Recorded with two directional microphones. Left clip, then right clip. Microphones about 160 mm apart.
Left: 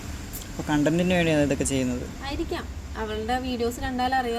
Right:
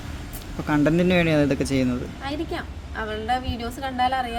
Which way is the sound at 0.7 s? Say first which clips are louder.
Right 3 dB; 35° right (ahead or behind).